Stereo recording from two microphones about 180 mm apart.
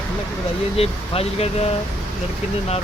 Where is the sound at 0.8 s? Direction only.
35° left (ahead or behind).